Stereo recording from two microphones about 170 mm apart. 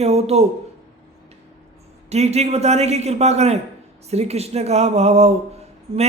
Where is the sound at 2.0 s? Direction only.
40° right (ahead or behind).